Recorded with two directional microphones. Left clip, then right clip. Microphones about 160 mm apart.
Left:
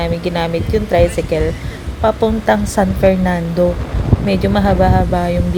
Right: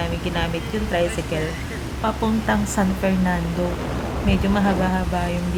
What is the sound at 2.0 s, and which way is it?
A woman's voice, 40° left (ahead or behind).